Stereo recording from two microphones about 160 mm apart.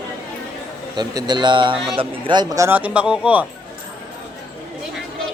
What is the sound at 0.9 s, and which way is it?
A man's voice, 25° right (ahead or behind).